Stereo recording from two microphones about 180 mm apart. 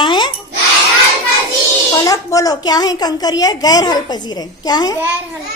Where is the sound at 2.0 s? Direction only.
20° left (ahead or behind).